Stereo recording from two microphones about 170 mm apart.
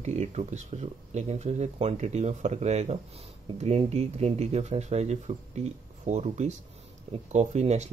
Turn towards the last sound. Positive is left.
turn(degrees=-40)  # may be behind; listen again after turning